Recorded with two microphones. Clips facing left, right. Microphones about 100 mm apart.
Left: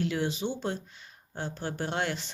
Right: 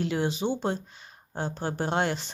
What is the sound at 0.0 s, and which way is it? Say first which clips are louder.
Speech: right 2 dB; 25° right (ahead or behind).